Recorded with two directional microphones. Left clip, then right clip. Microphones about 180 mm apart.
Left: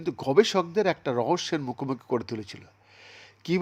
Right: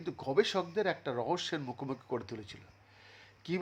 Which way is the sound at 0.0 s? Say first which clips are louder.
Left 9 dB; 30° left (ahead or behind).